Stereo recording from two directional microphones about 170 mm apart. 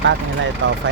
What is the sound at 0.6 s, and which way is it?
Speech, 90° right.